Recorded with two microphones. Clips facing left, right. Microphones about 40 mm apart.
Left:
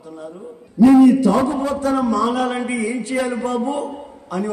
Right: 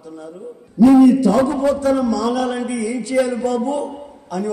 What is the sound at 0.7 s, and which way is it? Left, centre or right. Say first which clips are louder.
Speech: even; left.